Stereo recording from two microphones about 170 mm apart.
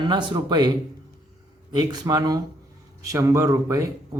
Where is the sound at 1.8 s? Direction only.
20° right (ahead or behind).